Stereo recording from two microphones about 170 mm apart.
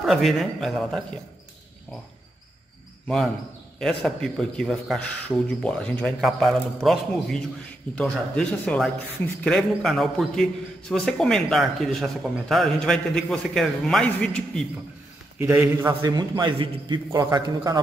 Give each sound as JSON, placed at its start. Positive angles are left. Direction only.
{"t": 0.0, "sound": "a man's voice", "side_deg": 0}
{"t": 3.8, "sound": "a man's voice", "side_deg": 5}
{"t": 15.3, "sound": "a man's voice", "side_deg": -15}